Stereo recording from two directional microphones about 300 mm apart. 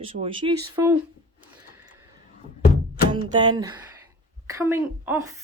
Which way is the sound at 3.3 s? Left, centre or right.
Centre.